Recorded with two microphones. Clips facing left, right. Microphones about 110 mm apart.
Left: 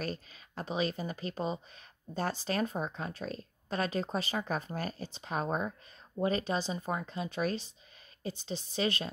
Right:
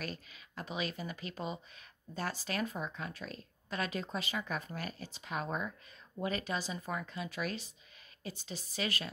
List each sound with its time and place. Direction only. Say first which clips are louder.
0.0 s speech: left 5 dB; 35° left (ahead or behind)